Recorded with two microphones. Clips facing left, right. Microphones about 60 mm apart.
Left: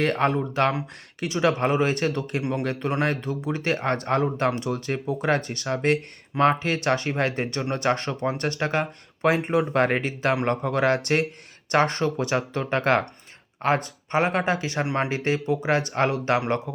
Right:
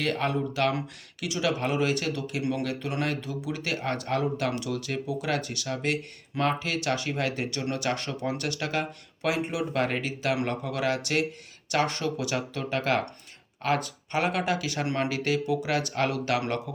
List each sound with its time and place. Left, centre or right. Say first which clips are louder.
0.0 s speech: left 5 dB; left
2.4 s speech: right 2 dB; left
2.6 s speech: left 5 dB; left